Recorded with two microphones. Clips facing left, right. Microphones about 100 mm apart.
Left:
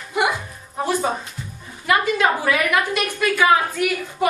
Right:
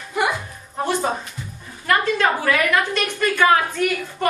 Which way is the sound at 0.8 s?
5° left (ahead or behind).